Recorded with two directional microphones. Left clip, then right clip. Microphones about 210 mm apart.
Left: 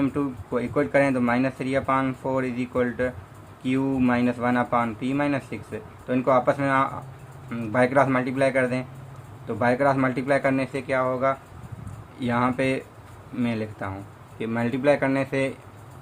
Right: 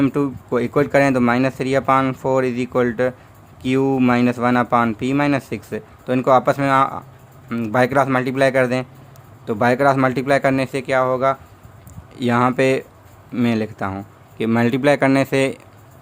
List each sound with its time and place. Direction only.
0.0 s speech: 55° right (ahead or behind)